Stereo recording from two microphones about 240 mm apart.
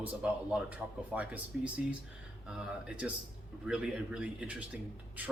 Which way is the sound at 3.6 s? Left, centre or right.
Centre.